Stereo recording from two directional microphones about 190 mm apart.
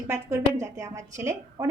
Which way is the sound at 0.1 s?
15° right (ahead or behind).